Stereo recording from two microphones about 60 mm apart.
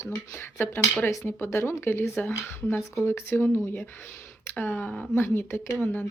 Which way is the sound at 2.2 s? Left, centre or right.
Left.